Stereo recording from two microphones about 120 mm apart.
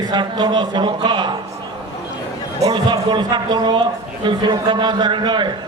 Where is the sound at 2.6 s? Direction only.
35° right (ahead or behind).